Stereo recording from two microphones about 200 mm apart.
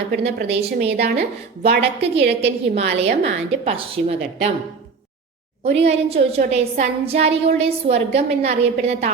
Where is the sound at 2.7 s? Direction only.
30° right (ahead or behind).